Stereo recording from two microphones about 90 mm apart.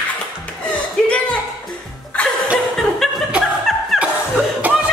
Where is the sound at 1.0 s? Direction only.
15° left (ahead or behind).